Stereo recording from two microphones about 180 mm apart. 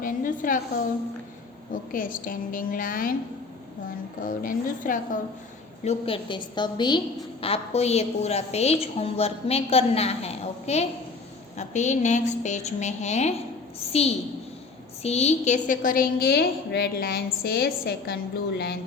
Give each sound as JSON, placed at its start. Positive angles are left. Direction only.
{"t": 0.0, "sound": "a woman's voice", "side_deg": 50}
{"t": 1.7, "sound": "a woman's voice", "side_deg": 50}
{"t": 4.2, "sound": "a woman's voice", "side_deg": 50}
{"t": 5.8, "sound": "a woman's voice", "side_deg": 35}
{"t": 15.0, "sound": "a woman's voice", "side_deg": 35}